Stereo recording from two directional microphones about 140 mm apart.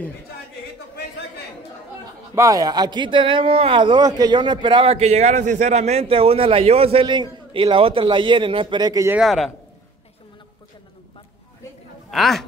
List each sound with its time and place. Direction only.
2.3 s speech: 25° right (ahead or behind)
9.2 s a man's voice: centre (ahead or behind)
12.1 s a man's voice: centre (ahead or behind)